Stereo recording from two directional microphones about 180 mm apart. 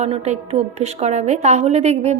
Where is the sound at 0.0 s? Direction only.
35° right (ahead or behind).